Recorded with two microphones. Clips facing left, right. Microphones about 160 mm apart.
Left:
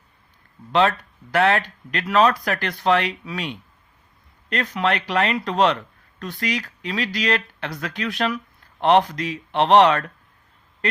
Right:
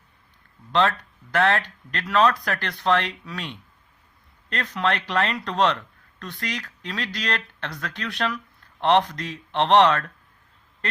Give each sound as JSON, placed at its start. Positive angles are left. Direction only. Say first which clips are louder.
{"t": 0.7, "sound": "speech", "louder": "left 3 dB", "side_deg": 10}
{"t": 4.6, "sound": "speech", "louder": "left 2 dB", "side_deg": 15}